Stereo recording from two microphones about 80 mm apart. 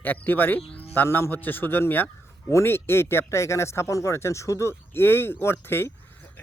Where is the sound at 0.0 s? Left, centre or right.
Left.